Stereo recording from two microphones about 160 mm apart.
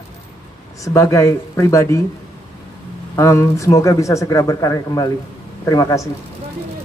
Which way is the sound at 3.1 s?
20° left (ahead or behind).